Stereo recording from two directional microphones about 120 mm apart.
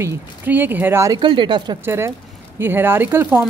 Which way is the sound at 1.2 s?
40° right (ahead or behind).